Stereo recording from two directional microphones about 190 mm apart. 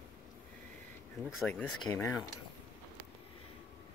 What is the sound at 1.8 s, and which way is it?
Speech, 20° left (ahead or behind).